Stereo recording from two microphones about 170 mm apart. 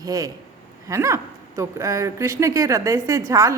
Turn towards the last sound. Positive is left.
turn(degrees=-15)  # may be behind; listen again after turning